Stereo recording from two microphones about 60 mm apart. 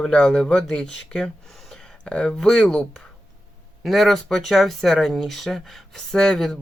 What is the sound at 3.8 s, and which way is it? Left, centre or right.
Speech, centre.